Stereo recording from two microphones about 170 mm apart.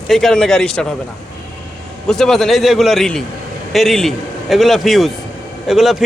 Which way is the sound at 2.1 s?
Centre (ahead or behind).